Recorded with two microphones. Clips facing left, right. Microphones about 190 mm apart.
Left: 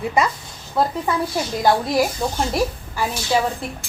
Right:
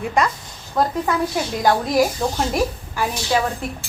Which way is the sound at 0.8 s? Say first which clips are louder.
Even; 5° left (ahead or behind).